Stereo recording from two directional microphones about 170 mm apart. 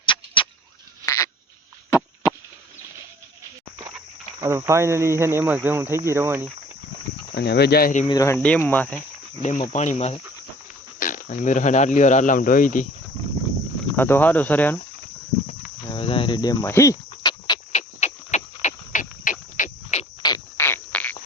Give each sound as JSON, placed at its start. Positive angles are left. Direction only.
{"t": 0.0, "sound": "a sound", "side_deg": 30}
{"t": 1.0, "sound": "a sound", "side_deg": 20}
{"t": 1.9, "sound": "chop", "side_deg": 20}
{"t": 4.4, "sound": "speech", "side_deg": -15}
{"t": 7.3, "sound": "speech", "side_deg": 75}
{"t": 8.0, "sound": "speech", "side_deg": 20}
{"t": 8.4, "sound": "speech", "side_deg": 5}
{"t": 9.4, "sound": "speech", "side_deg": 45}
{"t": 11.0, "sound": "speech", "side_deg": 50}
{"t": 13.9, "sound": "speech", "side_deg": 10}
{"t": 15.9, "sound": "cricket", "side_deg": 30}
{"t": 17.7, "sound": "a sound", "side_deg": 40}
{"t": 20.6, "sound": "insect", "side_deg": 15}